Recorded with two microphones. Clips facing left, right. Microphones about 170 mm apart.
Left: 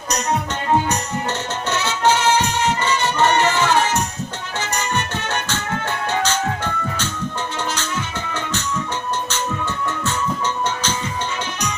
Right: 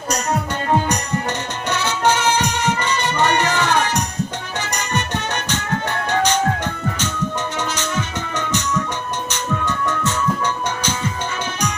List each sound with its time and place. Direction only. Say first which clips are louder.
1.7 s music: even; 15° right (ahead or behind)
8.3 s music: right 4 dB; 15° right (ahead or behind)